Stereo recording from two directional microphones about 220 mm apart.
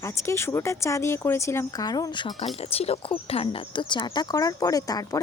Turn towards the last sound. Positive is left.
turn(degrees=15)  # may be behind; listen again after turning